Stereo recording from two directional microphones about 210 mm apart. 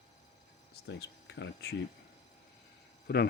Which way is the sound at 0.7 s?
55° left (ahead or behind).